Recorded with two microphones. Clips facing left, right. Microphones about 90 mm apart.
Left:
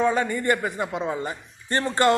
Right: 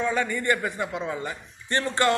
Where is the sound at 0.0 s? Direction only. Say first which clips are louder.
Left 3 dB; 35° left (ahead or behind).